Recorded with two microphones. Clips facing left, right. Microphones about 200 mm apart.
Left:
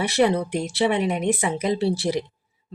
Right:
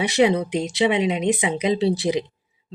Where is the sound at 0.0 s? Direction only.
15° right (ahead or behind).